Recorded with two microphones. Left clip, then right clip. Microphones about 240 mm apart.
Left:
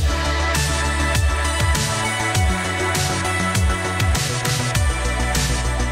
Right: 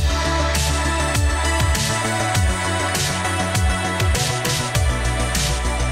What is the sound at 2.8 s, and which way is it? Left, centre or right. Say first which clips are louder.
Music: even; centre.